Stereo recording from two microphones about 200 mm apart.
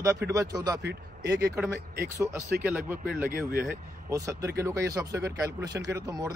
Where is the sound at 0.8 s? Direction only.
55° right (ahead or behind).